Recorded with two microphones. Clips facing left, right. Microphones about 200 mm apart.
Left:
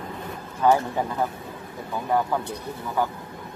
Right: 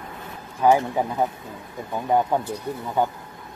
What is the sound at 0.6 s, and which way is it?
Speech, 15° right (ahead or behind).